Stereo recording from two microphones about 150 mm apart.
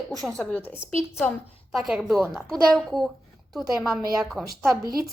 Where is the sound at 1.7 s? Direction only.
Centre (ahead or behind).